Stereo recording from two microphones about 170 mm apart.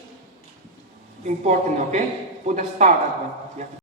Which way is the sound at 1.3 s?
45° right (ahead or behind).